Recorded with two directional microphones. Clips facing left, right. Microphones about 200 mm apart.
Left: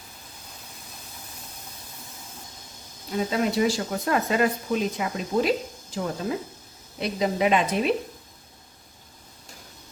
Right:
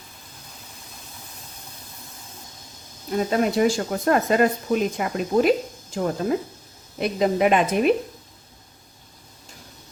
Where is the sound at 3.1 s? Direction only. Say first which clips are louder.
Right 3 dB; 50° right (ahead or behind).